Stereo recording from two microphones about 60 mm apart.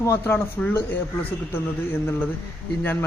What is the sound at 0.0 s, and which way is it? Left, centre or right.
Speech, left.